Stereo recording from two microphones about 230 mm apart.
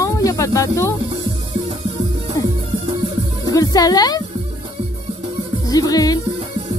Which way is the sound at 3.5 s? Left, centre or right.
Centre.